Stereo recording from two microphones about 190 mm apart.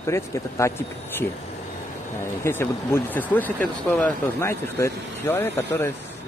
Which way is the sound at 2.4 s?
15° left (ahead or behind).